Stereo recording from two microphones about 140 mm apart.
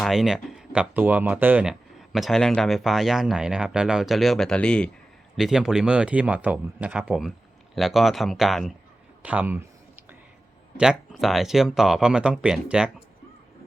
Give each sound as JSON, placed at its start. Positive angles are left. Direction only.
{"t": 0.0, "sound": "speech", "side_deg": 0}
{"t": 5.4, "sound": "speech", "side_deg": -5}
{"t": 9.2, "sound": "a sound", "side_deg": -10}
{"t": 10.8, "sound": "speech", "side_deg": -5}